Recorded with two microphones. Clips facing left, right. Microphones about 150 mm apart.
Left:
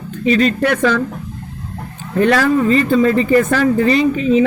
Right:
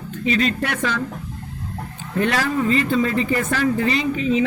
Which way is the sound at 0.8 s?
60° left (ahead or behind).